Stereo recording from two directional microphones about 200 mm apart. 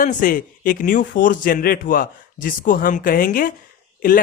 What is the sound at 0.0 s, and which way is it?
Speech, 40° left (ahead or behind).